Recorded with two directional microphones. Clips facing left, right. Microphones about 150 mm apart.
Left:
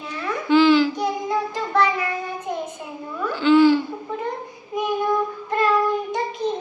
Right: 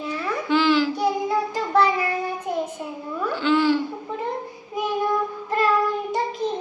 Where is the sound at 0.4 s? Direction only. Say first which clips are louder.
Left 5 dB; centre (ahead or behind).